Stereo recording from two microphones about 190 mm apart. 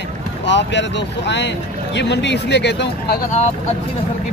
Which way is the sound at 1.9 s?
65° left (ahead or behind).